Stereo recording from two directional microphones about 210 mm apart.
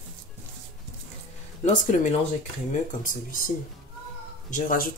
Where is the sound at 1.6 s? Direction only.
35° left (ahead or behind).